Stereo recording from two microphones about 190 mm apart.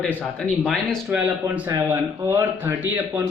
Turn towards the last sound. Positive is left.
turn(degrees=-10)  # may be behind; listen again after turning